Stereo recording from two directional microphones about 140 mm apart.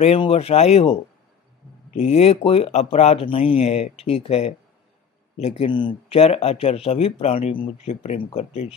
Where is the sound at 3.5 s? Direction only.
50° left (ahead or behind).